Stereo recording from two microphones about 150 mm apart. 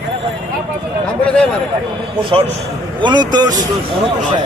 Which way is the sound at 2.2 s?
35° right (ahead or behind).